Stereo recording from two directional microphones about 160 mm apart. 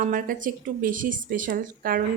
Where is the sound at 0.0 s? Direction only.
60° right (ahead or behind).